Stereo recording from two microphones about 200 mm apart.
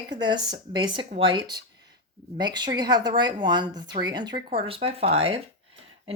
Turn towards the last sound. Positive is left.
turn(degrees=-30)  # may be behind; listen again after turning